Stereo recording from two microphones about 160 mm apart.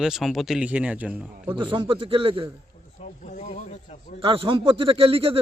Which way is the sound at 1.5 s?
30° right (ahead or behind).